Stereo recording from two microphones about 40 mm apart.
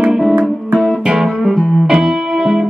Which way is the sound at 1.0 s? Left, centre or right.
Centre.